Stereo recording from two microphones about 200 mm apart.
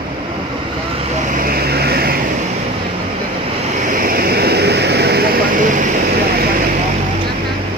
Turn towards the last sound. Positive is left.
turn(degrees=-50)  # may be behind; listen again after turning